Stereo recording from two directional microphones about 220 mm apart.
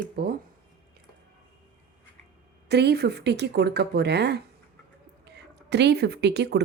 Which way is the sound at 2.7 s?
50° right (ahead or behind).